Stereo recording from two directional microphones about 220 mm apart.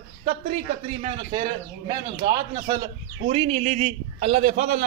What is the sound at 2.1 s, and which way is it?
A man's voice, 20° right (ahead or behind).